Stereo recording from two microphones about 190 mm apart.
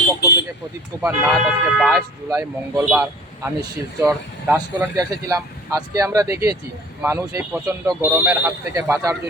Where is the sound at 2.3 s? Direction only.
15° right (ahead or behind).